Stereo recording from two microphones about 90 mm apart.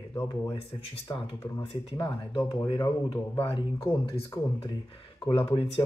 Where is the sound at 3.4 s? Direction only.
70° left (ahead or behind).